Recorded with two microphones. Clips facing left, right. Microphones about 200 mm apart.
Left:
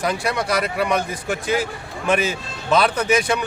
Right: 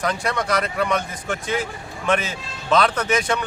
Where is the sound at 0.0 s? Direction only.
10° left (ahead or behind).